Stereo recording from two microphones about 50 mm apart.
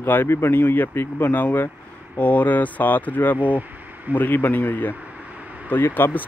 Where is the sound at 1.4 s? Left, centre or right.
Left.